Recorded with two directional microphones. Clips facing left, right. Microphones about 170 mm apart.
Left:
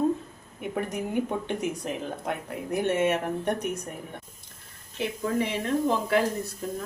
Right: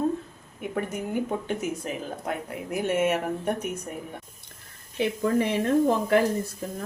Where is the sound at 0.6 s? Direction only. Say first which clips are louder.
Even; centre (ahead or behind).